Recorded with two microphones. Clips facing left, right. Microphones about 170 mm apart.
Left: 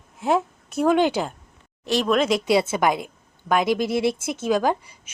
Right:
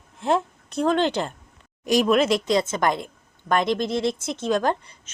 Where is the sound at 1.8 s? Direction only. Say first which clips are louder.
Right 2 dB; 10° right (ahead or behind).